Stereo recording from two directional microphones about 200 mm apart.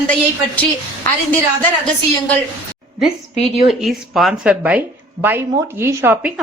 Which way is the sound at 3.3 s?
35° left (ahead or behind).